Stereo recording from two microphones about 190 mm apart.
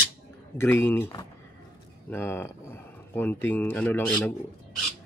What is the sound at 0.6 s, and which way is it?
A man's voice, 10° left (ahead or behind).